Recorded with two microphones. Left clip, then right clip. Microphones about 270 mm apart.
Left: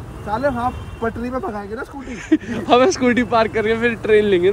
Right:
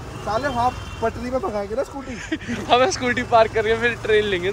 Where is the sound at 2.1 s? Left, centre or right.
Left.